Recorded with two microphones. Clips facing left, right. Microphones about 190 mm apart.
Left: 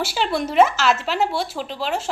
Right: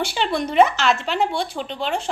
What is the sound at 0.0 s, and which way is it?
Speech, 5° left (ahead or behind).